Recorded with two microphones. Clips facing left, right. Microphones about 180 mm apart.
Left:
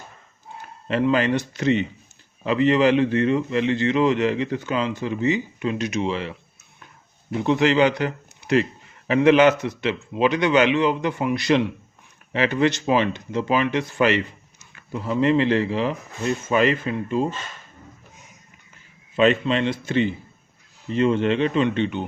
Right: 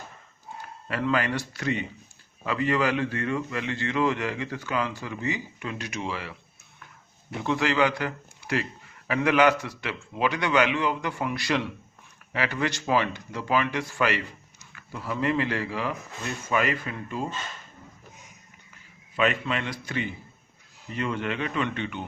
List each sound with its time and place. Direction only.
0.9 s a man's voice: 25° left (ahead or behind)
7.4 s a man's voice: 20° left (ahead or behind)
19.1 s a man's voice: 25° left (ahead or behind)